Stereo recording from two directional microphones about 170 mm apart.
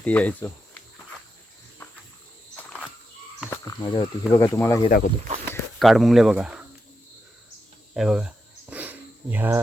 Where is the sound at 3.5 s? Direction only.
20° left (ahead or behind).